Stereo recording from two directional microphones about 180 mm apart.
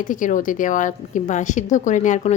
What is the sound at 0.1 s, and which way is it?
A woman's voice, 45° left (ahead or behind).